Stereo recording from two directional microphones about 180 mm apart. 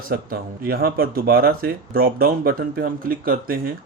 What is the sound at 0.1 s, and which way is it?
Speech, 55° right (ahead or behind).